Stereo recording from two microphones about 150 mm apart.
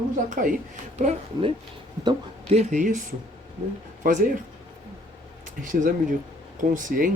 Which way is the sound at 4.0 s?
60° right (ahead or behind).